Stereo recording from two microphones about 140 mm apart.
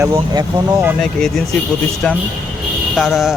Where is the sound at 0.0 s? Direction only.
25° right (ahead or behind).